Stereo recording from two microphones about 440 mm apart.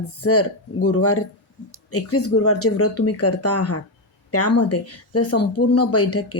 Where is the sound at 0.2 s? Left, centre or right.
Left.